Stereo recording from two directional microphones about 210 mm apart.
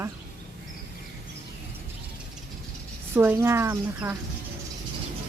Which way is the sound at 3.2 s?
10° right (ahead or behind).